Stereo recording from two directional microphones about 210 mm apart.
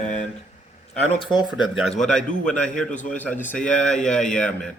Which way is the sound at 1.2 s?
20° left (ahead or behind).